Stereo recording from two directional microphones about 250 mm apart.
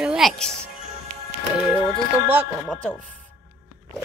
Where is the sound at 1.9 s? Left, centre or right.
Centre.